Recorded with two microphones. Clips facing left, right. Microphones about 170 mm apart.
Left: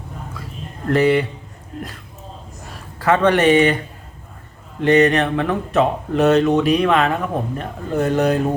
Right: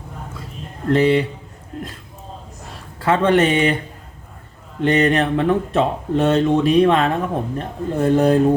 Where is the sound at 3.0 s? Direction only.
30° right (ahead or behind).